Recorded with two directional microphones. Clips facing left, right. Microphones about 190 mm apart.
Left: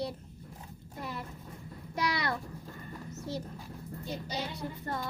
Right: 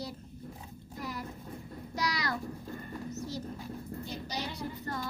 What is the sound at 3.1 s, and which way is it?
Speech, 55° left (ahead or behind).